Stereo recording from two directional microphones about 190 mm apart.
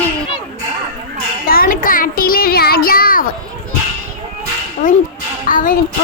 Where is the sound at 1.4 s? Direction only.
50° left (ahead or behind).